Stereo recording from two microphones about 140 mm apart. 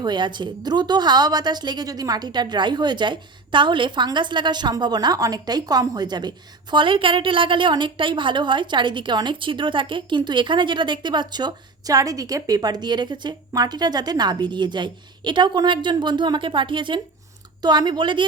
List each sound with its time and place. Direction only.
0.0 s a woman's voice: 35° right (ahead or behind)